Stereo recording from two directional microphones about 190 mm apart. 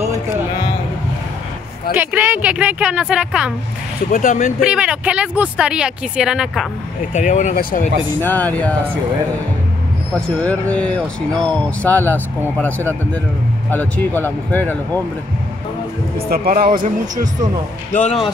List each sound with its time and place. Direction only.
2.0 s speech: 10° right (ahead or behind)
4.1 s speech: 45° left (ahead or behind)
4.6 s speech: 5° right (ahead or behind)
7.2 s speech: 40° left (ahead or behind)
8.2 s speech: 10° left (ahead or behind)
10.1 s speech: 5° left (ahead or behind)
16.3 s speech: 50° right (ahead or behind)
17.9 s speech: 35° left (ahead or behind)